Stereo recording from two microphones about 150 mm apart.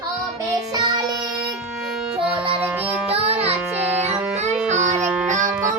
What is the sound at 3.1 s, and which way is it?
Music, 45° right (ahead or behind).